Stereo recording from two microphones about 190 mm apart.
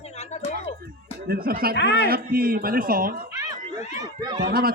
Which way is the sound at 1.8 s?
65° left (ahead or behind).